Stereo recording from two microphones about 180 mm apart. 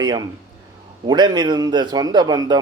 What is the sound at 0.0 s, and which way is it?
A man's voice, 20° right (ahead or behind).